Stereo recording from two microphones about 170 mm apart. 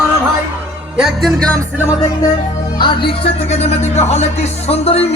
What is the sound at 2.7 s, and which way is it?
Speech, 25° left (ahead or behind).